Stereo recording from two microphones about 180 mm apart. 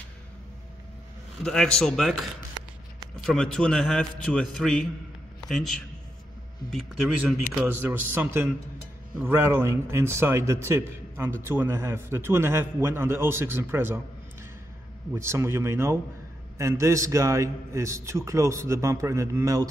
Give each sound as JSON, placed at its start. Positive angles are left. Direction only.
{"t": 1.4, "sound": "a man's voice", "side_deg": 5}
{"t": 7.6, "sound": "a man's voice", "side_deg": -10}
{"t": 15.1, "sound": "a man's voice", "side_deg": -15}